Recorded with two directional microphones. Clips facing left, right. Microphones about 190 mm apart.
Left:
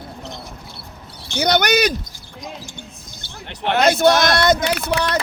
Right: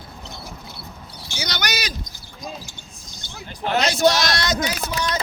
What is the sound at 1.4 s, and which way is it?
Speech, 60° left (ahead or behind).